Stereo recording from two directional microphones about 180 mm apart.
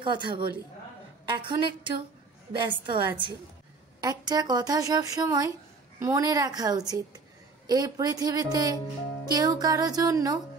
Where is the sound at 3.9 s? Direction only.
20° right (ahead or behind).